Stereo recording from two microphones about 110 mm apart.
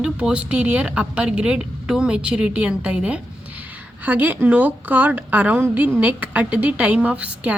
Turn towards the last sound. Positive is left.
turn(degrees=-10)  # may be behind; listen again after turning